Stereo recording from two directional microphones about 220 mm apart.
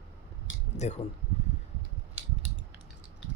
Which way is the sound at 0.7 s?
30° left (ahead or behind).